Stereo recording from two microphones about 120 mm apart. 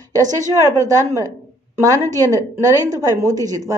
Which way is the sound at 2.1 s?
30° right (ahead or behind).